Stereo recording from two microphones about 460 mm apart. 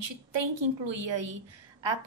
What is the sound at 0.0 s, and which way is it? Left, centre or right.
A woman's voice, right.